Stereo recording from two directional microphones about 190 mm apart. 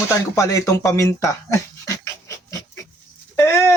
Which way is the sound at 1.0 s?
15° left (ahead or behind).